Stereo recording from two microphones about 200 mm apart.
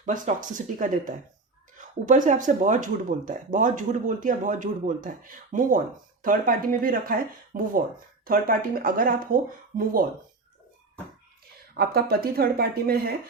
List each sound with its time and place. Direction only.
0.0 s speech: 40° right (ahead or behind)
11.8 s speech: 50° right (ahead or behind)